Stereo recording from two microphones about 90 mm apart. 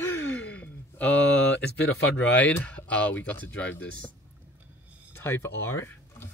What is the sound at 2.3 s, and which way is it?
Speech, 15° left (ahead or behind).